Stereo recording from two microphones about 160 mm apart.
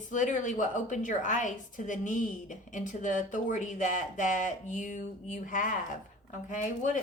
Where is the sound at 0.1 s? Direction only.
50° left (ahead or behind).